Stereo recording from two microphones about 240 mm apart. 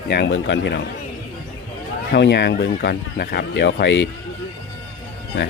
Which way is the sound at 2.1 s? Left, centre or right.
Left.